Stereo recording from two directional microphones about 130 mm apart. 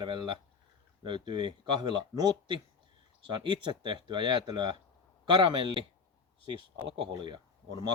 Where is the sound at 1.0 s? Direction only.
35° right (ahead or behind).